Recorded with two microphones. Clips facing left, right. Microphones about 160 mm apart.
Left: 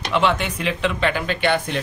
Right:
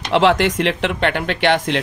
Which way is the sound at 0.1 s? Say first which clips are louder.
Right 6 dB; 90° right.